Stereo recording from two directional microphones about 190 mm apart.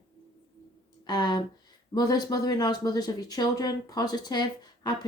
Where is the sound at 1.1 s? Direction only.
20° left (ahead or behind).